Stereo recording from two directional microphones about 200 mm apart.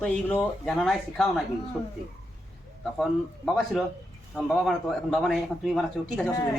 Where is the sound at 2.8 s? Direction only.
Centre (ahead or behind).